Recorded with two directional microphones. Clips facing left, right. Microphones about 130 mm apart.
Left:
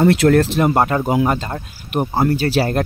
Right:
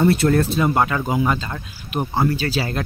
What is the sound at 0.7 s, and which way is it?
Speech, 45° left (ahead or behind).